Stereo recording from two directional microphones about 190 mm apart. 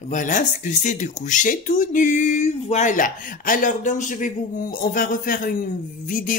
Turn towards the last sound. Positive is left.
turn(degrees=45)  # may be behind; listen again after turning